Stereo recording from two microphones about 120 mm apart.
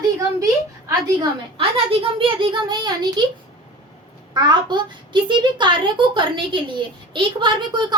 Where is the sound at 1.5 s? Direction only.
50° right (ahead or behind).